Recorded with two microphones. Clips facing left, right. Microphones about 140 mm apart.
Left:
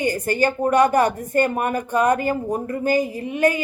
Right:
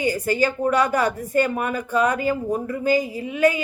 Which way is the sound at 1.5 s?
50° left (ahead or behind).